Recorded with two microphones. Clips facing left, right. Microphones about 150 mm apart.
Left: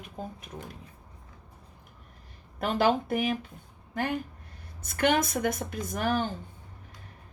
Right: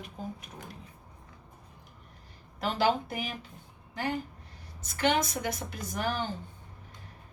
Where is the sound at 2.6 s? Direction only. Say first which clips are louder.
Left 3 dB; 55° left (ahead or behind).